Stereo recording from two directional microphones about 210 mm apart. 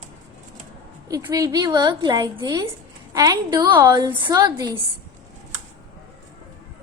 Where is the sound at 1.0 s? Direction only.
15° right (ahead or behind).